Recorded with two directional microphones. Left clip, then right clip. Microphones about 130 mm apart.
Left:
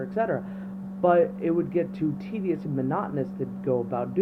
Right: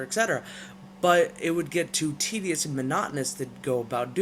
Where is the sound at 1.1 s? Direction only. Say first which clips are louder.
Even; 75° right (ahead or behind).